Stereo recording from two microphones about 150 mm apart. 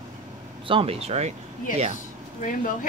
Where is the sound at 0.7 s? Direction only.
40° right (ahead or behind).